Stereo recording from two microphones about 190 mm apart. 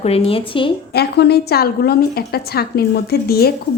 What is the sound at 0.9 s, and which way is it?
A woman's voice, 60° left (ahead or behind).